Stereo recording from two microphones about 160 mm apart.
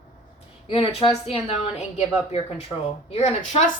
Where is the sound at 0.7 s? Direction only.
40° left (ahead or behind).